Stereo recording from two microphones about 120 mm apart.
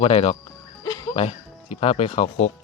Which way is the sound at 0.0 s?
55° left (ahead or behind).